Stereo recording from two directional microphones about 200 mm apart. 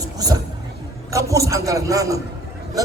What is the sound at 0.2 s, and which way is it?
Vehicle, 20° right (ahead or behind).